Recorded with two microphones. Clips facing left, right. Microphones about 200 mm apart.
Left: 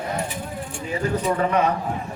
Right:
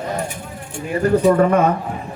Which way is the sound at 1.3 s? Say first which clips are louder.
Right 6 dB; 50° right (ahead or behind).